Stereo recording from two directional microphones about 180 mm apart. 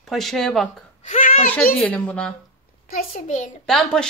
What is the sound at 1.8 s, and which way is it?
Speech, 5° left (ahead or behind).